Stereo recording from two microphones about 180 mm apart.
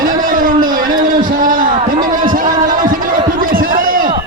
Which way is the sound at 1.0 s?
50° right (ahead or behind).